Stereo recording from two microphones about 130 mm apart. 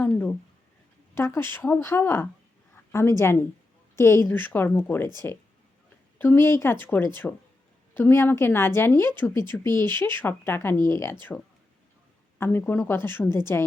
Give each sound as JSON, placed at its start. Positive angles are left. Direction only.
{"t": 0.0, "sound": "a woman's voice", "side_deg": 10}
{"t": 12.4, "sound": "a woman's voice", "side_deg": 15}